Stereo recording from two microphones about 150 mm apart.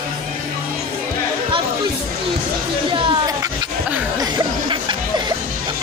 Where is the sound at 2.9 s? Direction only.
30° right (ahead or behind).